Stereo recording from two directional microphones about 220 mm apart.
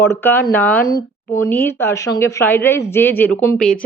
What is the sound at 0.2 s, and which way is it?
Speech, 10° left (ahead or behind).